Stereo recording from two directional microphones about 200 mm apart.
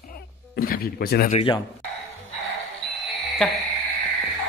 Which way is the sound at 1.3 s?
30° left (ahead or behind).